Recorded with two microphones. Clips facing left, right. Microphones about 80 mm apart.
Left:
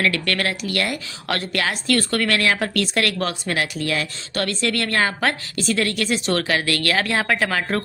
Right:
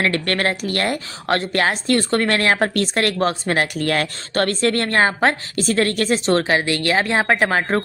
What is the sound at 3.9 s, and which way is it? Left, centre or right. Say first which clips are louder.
A woman's voice: right 4 dB; right.